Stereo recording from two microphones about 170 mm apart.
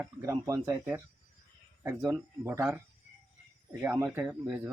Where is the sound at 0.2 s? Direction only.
15° right (ahead or behind).